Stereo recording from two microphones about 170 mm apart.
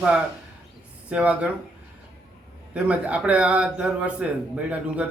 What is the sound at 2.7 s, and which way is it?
A man's voice, 5° right (ahead or behind).